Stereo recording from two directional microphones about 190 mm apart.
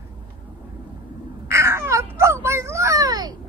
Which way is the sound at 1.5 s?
15° right (ahead or behind).